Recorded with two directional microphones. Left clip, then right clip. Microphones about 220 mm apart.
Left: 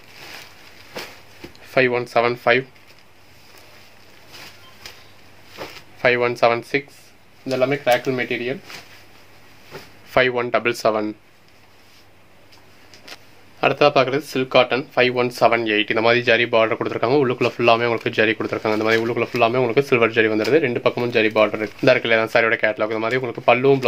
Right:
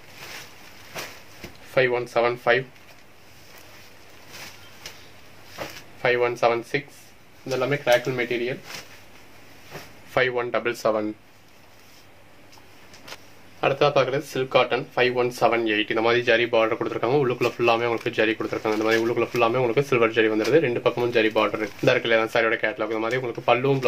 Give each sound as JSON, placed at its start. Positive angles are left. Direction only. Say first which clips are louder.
{"t": 1.7, "sound": "speech", "louder": "left 3 dB", "side_deg": 50}
{"t": 6.0, "sound": "speech", "louder": "left 4 dB", "side_deg": 45}
{"t": 10.1, "sound": "speech", "louder": "left 5 dB", "side_deg": 50}
{"t": 13.6, "sound": "speech", "louder": "left 4 dB", "side_deg": 45}